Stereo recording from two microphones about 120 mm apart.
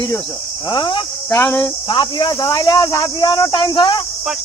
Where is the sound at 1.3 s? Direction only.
20° left (ahead or behind).